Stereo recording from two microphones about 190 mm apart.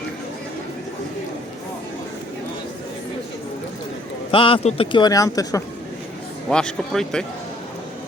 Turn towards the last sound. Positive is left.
turn(degrees=5)  # may be behind; listen again after turning